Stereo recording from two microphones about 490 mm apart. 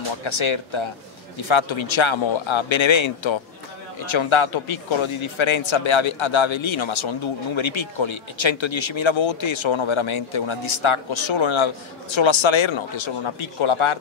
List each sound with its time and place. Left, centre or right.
0.2 s speech: left